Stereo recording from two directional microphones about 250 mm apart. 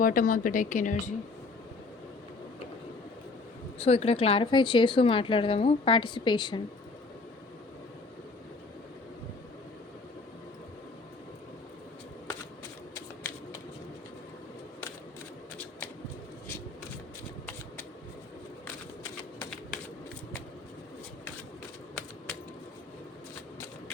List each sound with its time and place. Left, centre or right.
0.0 s a woman's voice: left
3.8 s speech: left
19.4 s typewriter: centre